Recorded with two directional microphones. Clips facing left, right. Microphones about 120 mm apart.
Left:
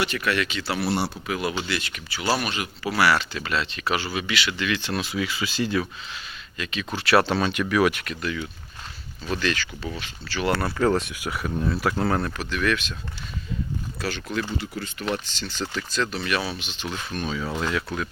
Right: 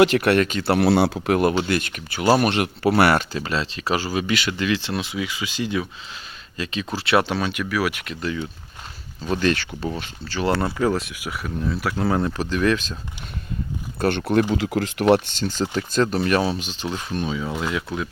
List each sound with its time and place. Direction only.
0.0 s speech: 60° right (ahead or behind)
3.3 s speech: 35° right (ahead or behind); by 5.9 s 15° right (ahead or behind)
6.6 s speech: 30° right (ahead or behind)
7.3 s speech: 10° right (ahead or behind)
8.0 s speech: 25° right (ahead or behind)
9.4 s speech: 45° right (ahead or behind)
10.4 s speech: 30° right (ahead or behind)
10.7 s speech: 10° right (ahead or behind)
12.4 s speech: 35° right (ahead or behind)
14.0 s speech: 60° right (ahead or behind)
14.5 s speech: 90° right
15.0 s speech: 50° right (ahead or behind); by 17.8 s 10° right (ahead or behind)